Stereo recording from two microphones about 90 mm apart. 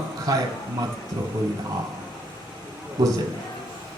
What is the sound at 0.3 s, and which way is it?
Speech, 45° right (ahead or behind).